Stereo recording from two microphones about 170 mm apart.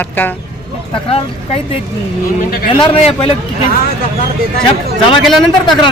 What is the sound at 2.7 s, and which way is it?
Speech, 30° left (ahead or behind).